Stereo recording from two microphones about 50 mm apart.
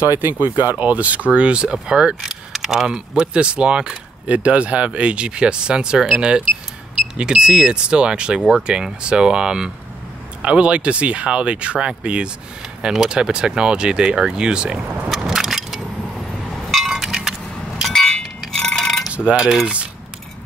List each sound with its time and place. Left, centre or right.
0.0 s speech: right; by 2.1 s centre
2.2 s speech: centre
2.9 s speech: centre
4.3 s speech: right
12.8 s speech: centre
15.1 s a sound: centre
16.5 s chink: centre
17.9 s chink: centre
19.1 s cutlery: right
19.4 s speech: centre